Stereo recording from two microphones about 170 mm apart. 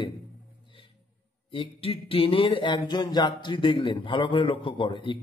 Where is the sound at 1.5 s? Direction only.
30° left (ahead or behind).